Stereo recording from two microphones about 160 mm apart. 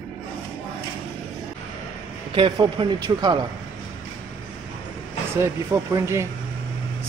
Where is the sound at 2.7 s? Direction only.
30° right (ahead or behind).